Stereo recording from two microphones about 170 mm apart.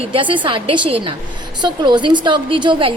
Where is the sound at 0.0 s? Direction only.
30° right (ahead or behind).